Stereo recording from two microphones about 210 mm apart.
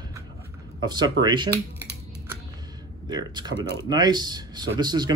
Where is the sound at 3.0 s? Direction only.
20° right (ahead or behind).